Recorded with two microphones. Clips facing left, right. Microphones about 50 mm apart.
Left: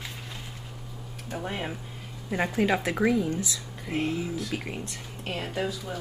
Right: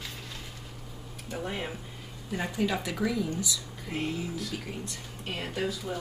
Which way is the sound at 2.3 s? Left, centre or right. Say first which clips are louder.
Left 5 dB; left.